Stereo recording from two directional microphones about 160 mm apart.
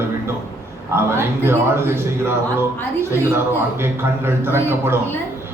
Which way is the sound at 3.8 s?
15° right (ahead or behind).